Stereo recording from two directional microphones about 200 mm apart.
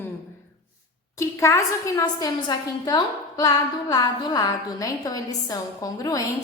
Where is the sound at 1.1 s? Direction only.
15° left (ahead or behind).